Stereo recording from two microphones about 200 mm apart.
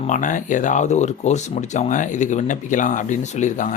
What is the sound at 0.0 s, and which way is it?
Speech, 40° left (ahead or behind).